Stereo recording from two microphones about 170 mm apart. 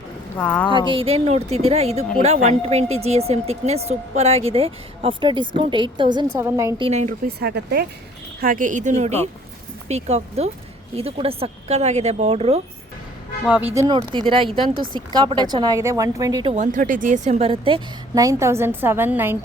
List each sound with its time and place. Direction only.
0.3 s speech: 10° left (ahead or behind)
0.9 s speech: 35° right (ahead or behind)
6.3 s a woman's voice: 15° right (ahead or behind)
6.7 s speech: 35° right (ahead or behind)
7.3 s speech: 70° right (ahead or behind)
8.4 s speech: 55° right (ahead or behind); by 12.6 s 40° right (ahead or behind)
13.4 s a woman's voice: 10° right (ahead or behind)
13.8 s speech: 25° right (ahead or behind)
16.5 s speech: 45° right (ahead or behind)
17.5 s a woman's voice: 30° right (ahead or behind); by 19.4 s 15° right (ahead or behind)